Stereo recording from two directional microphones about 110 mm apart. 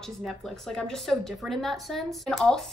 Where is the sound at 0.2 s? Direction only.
Centre (ahead or behind).